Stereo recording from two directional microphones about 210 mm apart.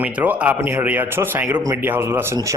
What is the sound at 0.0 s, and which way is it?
Speech, 5° right (ahead or behind).